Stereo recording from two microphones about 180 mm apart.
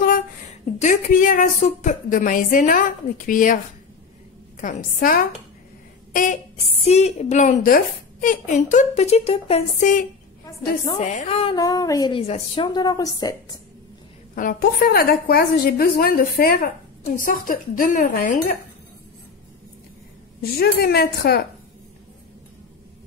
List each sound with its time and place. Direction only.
0.7 s speech: 45° left (ahead or behind)
4.6 s a woman's voice: 45° left (ahead or behind)
10.4 s a woman's voice: 25° left (ahead or behind)
11.0 s a woman's voice: 40° left (ahead or behind)
11.5 s a woman's voice: 20° left (ahead or behind)
12.2 s a woman's voice: 30° left (ahead or behind)
14.3 s a woman's voice: 50° left (ahead or behind)
20.5 s a woman's voice: 60° left (ahead or behind)